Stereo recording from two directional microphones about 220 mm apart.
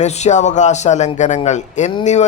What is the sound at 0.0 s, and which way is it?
A man's voice, 30° left (ahead or behind).